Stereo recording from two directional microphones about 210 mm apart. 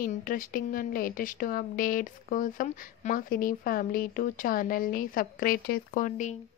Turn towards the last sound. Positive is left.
turn(degrees=35)  # may be behind; listen again after turning